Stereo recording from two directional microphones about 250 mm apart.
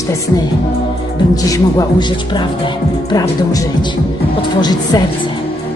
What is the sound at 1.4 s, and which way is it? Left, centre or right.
A woman's voice, centre.